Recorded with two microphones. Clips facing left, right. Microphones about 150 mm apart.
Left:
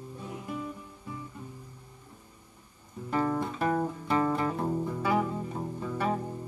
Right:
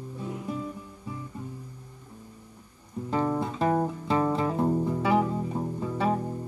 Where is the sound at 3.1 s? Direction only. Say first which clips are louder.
Right 2 dB; 15° right (ahead or behind).